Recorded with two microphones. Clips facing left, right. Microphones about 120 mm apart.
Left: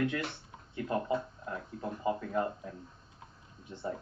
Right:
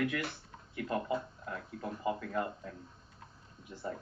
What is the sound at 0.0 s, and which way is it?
Speech, 25° left (ahead or behind).